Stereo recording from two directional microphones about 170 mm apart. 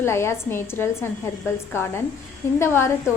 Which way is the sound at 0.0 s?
15° left (ahead or behind).